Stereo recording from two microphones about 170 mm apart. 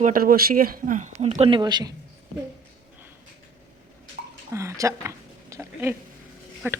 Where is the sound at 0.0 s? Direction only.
55° right (ahead or behind); by 1.9 s 25° right (ahead or behind).